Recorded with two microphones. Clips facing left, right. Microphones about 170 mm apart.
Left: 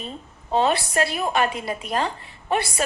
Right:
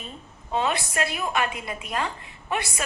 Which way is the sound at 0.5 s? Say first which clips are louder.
Left 5 dB; 35° left (ahead or behind).